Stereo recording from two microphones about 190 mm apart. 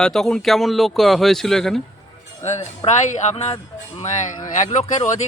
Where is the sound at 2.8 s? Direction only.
25° left (ahead or behind).